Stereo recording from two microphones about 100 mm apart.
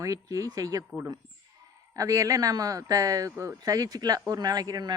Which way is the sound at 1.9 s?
35° right (ahead or behind).